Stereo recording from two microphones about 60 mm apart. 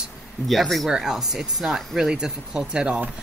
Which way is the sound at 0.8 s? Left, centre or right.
Centre.